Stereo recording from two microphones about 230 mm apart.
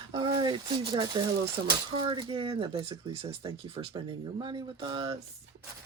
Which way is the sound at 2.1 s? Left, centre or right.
Right.